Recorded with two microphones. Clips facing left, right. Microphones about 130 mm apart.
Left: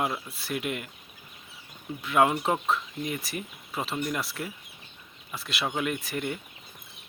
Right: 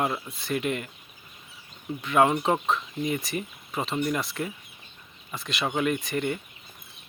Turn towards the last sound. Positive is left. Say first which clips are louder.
# right 4 dB
turn(degrees=5)  # may be behind; listen again after turning